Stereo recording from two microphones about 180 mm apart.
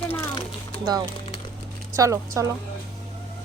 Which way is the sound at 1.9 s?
15° right (ahead or behind).